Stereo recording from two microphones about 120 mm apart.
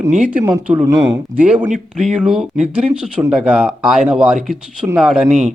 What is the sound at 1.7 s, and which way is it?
Speech, 75° right (ahead or behind).